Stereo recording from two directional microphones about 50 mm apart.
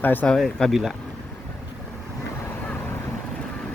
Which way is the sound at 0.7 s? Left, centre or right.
Centre.